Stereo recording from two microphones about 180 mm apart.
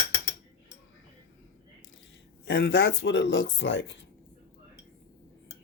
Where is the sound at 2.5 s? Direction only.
75° left (ahead or behind); by 3.9 s 90° left.